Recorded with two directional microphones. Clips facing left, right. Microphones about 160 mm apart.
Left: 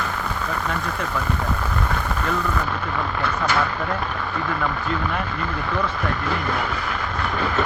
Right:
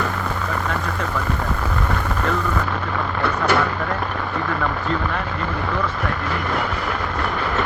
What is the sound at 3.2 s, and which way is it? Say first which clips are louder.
Speech: right 5 dB; 65° right (ahead or behind).